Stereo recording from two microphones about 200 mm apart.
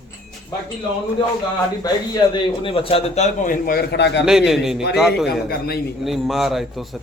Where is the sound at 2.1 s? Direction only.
25° left (ahead or behind); by 4.2 s 60° left (ahead or behind).